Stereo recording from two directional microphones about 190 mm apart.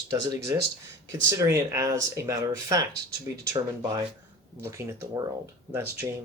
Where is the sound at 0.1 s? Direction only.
20° right (ahead or behind).